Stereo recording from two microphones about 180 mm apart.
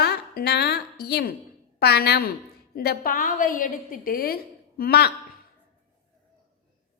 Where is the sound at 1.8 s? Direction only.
65° left (ahead or behind).